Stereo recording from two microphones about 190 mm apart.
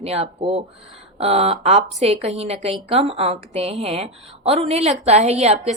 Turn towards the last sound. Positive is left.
turn(degrees=-35)  # may be behind; listen again after turning